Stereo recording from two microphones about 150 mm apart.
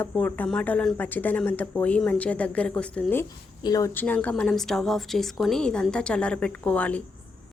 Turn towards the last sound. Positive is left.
turn(degrees=10)  # may be behind; listen again after turning